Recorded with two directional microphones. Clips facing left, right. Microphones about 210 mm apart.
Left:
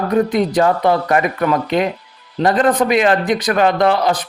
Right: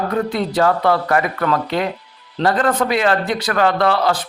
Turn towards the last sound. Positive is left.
turn(degrees=20)  # may be behind; listen again after turning